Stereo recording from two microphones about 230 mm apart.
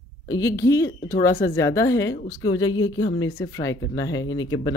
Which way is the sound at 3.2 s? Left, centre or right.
Left.